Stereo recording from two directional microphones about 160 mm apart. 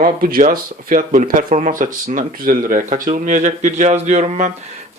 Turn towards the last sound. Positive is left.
turn(degrees=-45)  # may be behind; listen again after turning